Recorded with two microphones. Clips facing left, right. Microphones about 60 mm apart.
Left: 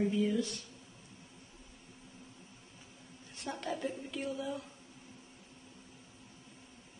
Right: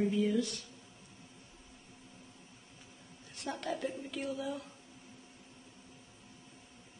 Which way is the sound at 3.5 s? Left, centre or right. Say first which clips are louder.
Even; left.